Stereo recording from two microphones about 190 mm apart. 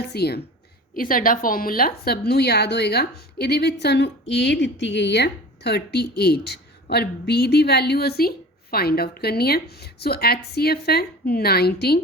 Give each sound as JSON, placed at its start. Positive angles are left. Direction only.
{"t": 0.0, "sound": "speech", "side_deg": 60}
{"t": 0.9, "sound": "a woman's voice", "side_deg": 50}